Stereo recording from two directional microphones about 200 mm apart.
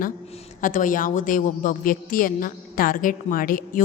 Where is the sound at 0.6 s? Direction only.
40° left (ahead or behind).